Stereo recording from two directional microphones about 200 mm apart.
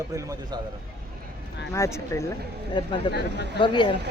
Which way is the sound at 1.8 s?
15° left (ahead or behind).